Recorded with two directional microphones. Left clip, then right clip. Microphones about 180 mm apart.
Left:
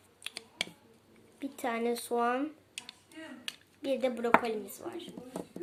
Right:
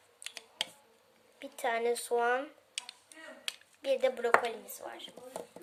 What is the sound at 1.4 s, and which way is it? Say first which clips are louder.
A woman's voice: right 1 dB; centre (ahead or behind).